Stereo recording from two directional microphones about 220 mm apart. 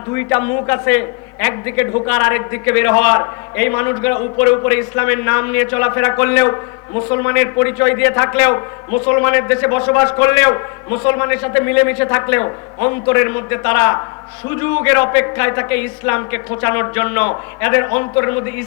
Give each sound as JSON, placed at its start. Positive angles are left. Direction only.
{"t": 0.1, "sound": "a man's voice", "side_deg": 10}